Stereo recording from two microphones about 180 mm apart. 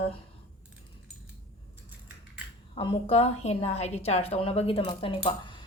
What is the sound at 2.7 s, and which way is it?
A woman's voice, 30° left (ahead or behind).